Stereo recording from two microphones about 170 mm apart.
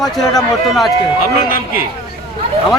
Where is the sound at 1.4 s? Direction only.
55° left (ahead or behind).